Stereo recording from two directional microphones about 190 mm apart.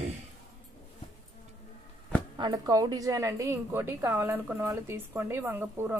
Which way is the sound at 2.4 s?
20° right (ahead or behind).